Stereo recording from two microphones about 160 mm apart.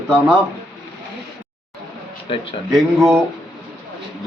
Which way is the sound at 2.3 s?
35° left (ahead or behind).